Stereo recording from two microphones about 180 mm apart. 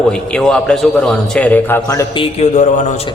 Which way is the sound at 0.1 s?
5° left (ahead or behind).